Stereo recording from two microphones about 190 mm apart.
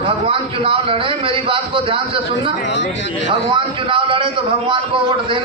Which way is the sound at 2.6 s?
70° left (ahead or behind).